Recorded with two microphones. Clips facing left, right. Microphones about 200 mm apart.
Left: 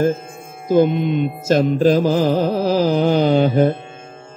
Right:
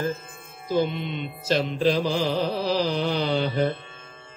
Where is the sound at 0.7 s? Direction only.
50° left (ahead or behind).